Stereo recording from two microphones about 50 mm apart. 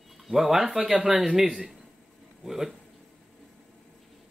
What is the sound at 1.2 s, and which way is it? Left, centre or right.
A man's voice, centre.